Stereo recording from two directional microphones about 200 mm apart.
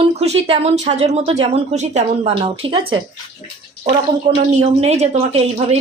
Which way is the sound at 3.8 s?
35° right (ahead or behind).